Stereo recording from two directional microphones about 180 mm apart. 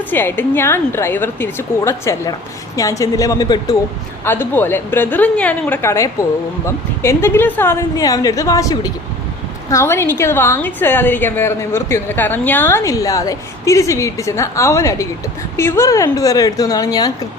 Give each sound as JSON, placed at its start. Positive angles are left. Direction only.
{"t": 0.1, "sound": "a woman's voice", "side_deg": 10}